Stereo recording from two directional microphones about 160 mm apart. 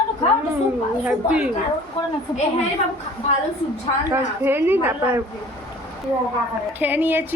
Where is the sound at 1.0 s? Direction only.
5° right (ahead or behind).